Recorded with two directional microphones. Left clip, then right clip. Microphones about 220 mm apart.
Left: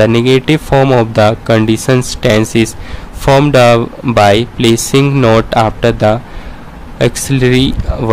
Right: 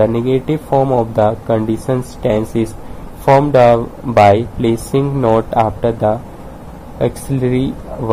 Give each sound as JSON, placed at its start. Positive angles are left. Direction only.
{"t": 0.0, "sound": "speech", "side_deg": 25}